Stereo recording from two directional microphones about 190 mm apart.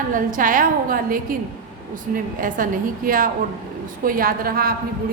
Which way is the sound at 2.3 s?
45° right (ahead or behind).